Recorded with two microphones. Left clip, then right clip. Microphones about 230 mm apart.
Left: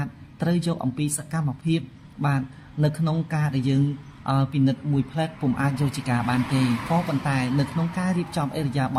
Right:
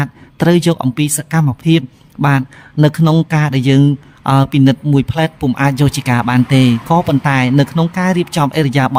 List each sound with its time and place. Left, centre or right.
0.0 s speech: right